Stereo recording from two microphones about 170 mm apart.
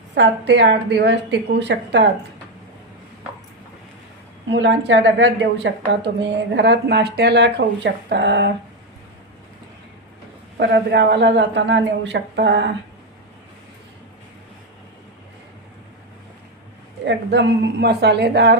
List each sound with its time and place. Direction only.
0.1 s a woman's voice: 85° right
4.4 s a woman's voice: 90° right
10.6 s a woman's voice: 90° right
17.1 s a woman's voice: 85° right